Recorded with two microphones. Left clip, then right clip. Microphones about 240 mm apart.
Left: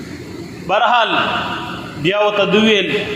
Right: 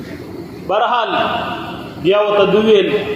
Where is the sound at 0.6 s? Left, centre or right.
Left.